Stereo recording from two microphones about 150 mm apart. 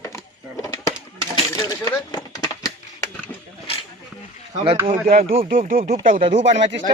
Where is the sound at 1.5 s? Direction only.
25° left (ahead or behind).